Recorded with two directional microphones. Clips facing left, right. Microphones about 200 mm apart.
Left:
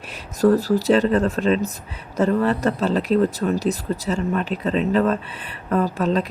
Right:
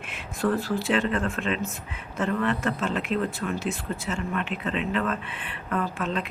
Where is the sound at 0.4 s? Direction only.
40° left (ahead or behind).